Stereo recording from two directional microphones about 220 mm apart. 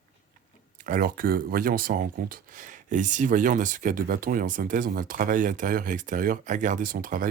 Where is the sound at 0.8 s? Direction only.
40° right (ahead or behind).